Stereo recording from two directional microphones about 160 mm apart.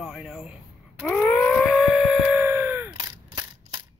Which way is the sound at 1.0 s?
5° left (ahead or behind).